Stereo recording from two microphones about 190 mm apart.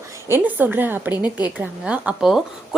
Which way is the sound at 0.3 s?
10° right (ahead or behind).